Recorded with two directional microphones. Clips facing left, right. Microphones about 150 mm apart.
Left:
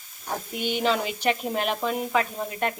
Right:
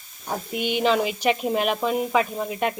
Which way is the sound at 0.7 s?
5° right (ahead or behind).